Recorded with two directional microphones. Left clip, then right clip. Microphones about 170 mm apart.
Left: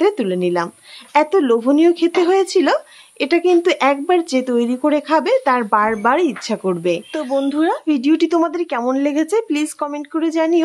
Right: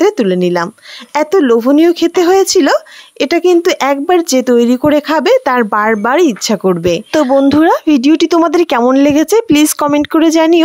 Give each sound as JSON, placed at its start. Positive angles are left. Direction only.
{"t": 0.0, "sound": "speech", "side_deg": -45}
{"t": 7.4, "sound": "speech", "side_deg": -60}
{"t": 8.5, "sound": "speech", "side_deg": -70}
{"t": 8.8, "sound": "speech", "side_deg": -55}